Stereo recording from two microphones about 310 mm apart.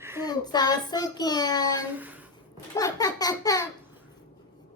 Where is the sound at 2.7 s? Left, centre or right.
Centre.